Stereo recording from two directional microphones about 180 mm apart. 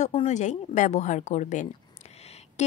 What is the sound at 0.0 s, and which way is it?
A woman's voice, 35° left (ahead or behind).